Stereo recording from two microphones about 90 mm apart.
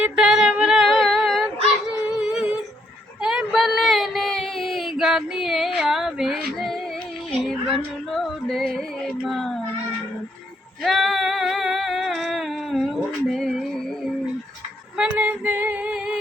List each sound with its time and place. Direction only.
0.0 s female singing: 10° right (ahead or behind)
1.9 s dog: 5° right (ahead or behind)
3.2 s a sound: 5° right (ahead or behind)
7.4 s music: centre (ahead or behind)
10.8 s female singing: centre (ahead or behind)
14.9 s female singing: 15° right (ahead or behind)